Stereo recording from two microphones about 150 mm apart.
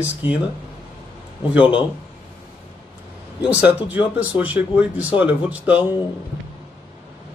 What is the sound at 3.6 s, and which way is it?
Speech, 10° right (ahead or behind).